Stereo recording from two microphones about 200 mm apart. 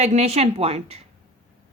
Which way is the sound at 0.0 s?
35° right (ahead or behind).